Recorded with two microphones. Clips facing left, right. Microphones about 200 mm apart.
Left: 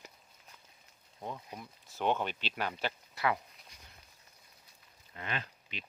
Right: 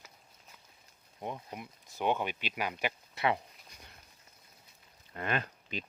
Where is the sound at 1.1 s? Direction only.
15° right (ahead or behind).